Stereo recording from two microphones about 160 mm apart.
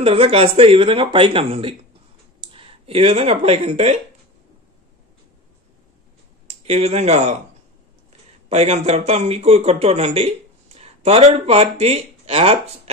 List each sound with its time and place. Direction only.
0.0 s speech: 35° right (ahead or behind)
6.4 s speech: 40° right (ahead or behind)
8.5 s speech: 40° right (ahead or behind)